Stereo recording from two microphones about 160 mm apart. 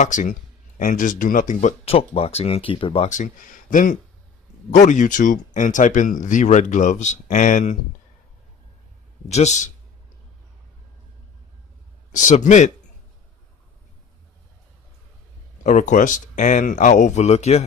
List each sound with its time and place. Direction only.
0.0 s speech: 50° left (ahead or behind); by 3.1 s 35° left (ahead or behind)
3.1 s speech: 55° left (ahead or behind)
9.3 s speech: 45° left (ahead or behind)
12.1 s speech: 50° left (ahead or behind)
15.6 s speech: 50° left (ahead or behind)